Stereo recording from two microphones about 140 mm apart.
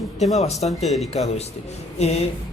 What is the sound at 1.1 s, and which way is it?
A man's voice, 50° left (ahead or behind).